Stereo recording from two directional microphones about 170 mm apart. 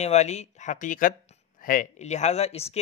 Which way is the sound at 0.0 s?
40° left (ahead or behind).